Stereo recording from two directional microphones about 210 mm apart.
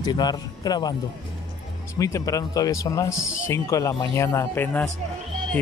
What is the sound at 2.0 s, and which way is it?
Speech, 15° left (ahead or behind).